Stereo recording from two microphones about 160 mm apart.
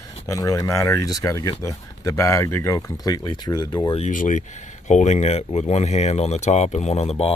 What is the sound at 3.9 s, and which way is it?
Speech, 50° left (ahead or behind).